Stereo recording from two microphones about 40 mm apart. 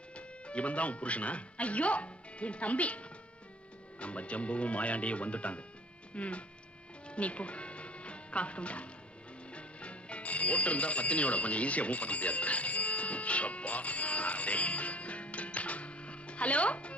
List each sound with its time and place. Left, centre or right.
0.1 s speech: left
7.1 s music: left
9.5 s speech: left